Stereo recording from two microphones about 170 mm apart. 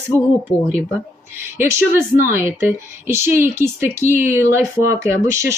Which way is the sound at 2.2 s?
15° right (ahead or behind).